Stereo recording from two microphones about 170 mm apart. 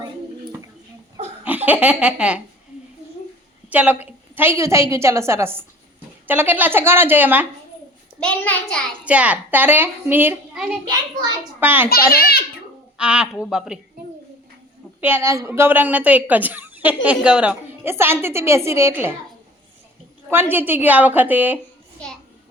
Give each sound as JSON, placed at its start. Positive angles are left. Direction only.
{"t": 1.5, "sound": "speech", "side_deg": -10}
{"t": 3.7, "sound": "a woman's voice", "side_deg": -10}
{"t": 8.2, "sound": "a child's voice", "side_deg": 5}
{"t": 9.0, "sound": "speech", "side_deg": -10}
{"t": 10.8, "sound": "a child's voice", "side_deg": -25}
{"t": 11.6, "sound": "speech", "side_deg": -10}
{"t": 11.9, "sound": "a child's voice", "side_deg": 65}
{"t": 13.0, "sound": "a woman's voice", "side_deg": -5}
{"t": 15.0, "sound": "speech", "side_deg": -15}
{"t": 20.3, "sound": "speech", "side_deg": -10}